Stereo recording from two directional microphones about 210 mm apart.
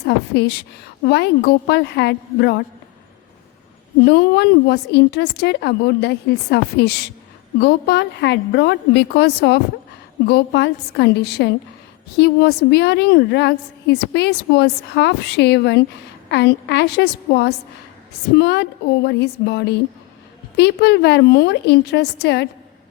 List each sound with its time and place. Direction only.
0.0 s a woman's voice: 50° left (ahead or behind)
4.0 s a woman's voice: 50° left (ahead or behind)